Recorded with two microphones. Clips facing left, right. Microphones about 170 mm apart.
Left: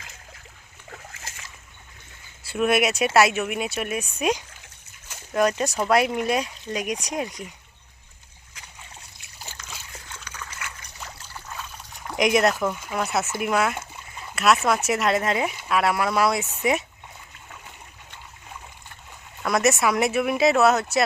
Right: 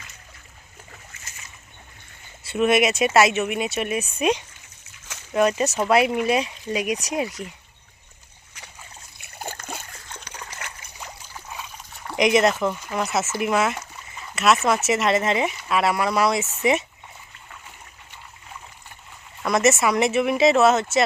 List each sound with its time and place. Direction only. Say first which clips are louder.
0.9 s splash: left 9 dB; 90° left
2.5 s speech: right 2 dB; centre (ahead or behind)
9.1 s a sound: right 12 dB; 55° right (ahead or behind)
10.1 s trickle: right 1 dB; 35° right (ahead or behind)
11.3 s trickle: even; 5° right (ahead or behind)
13.4 s speech: right 2 dB; centre (ahead or behind)
19.4 s speech: right 2 dB; centre (ahead or behind)